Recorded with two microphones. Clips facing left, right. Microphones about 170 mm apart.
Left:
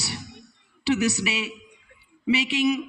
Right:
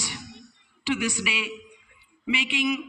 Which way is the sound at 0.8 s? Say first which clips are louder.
Left 4 dB; 40° left (ahead or behind).